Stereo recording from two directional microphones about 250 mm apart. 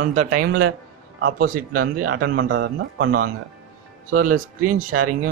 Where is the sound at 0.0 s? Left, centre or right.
Right.